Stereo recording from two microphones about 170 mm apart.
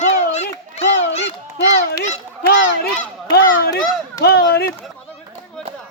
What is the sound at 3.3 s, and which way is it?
A man's voice, 60° left (ahead or behind).